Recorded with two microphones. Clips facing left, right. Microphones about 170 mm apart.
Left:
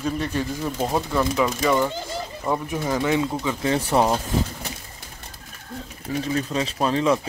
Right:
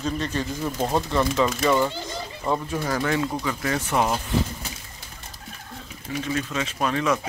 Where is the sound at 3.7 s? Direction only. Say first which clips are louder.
Left 4 dB; 35° left (ahead or behind).